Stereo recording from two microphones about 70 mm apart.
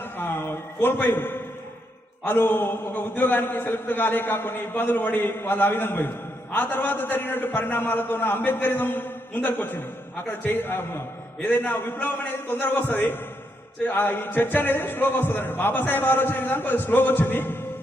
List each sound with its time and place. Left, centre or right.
0.0 s a man's voice: left